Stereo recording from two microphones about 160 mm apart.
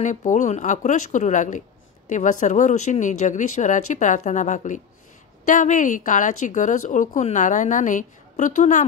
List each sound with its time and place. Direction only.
0.0 s speech: 50° left (ahead or behind)